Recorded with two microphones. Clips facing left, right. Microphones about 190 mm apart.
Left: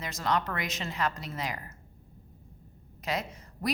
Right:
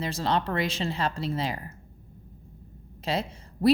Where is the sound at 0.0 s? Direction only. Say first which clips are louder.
Right 3 dB; 30° right (ahead or behind).